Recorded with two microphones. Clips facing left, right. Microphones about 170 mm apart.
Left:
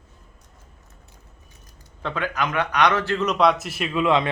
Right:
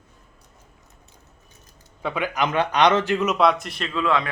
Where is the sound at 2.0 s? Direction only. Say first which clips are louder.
Right 1 dB; 10° right (ahead or behind).